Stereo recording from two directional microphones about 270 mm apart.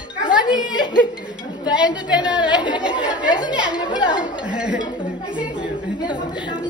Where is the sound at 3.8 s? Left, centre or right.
Centre.